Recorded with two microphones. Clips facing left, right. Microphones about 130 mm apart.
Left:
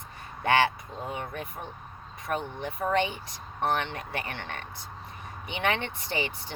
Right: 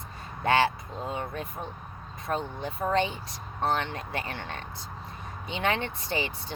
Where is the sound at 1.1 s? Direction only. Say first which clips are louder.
Right 2 dB; 15° left (ahead or behind).